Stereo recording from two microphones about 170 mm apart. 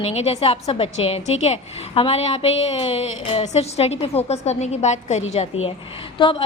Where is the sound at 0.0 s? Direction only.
40° left (ahead or behind).